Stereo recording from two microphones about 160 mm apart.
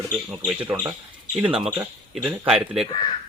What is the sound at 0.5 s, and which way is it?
Speech, 15° right (ahead or behind).